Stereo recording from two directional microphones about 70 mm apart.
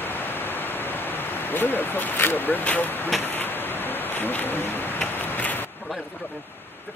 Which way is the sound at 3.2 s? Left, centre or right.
Left.